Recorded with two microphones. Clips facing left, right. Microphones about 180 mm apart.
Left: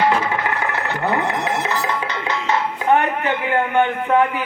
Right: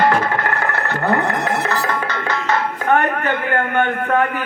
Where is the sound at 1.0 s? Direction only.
50° right (ahead or behind).